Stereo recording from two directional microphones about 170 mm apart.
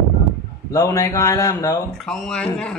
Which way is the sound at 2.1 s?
5° left (ahead or behind).